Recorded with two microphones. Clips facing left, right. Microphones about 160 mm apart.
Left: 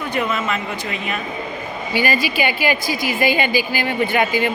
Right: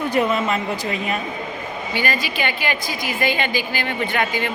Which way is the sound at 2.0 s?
5° left (ahead or behind).